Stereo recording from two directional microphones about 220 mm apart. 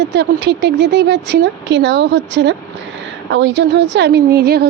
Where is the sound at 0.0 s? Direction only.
50° right (ahead or behind).